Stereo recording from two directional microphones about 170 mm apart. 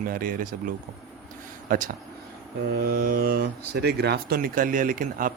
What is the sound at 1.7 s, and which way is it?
Speech, 50° right (ahead or behind).